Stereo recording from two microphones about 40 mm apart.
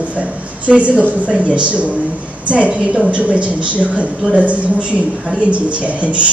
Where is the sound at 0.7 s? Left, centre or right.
Right.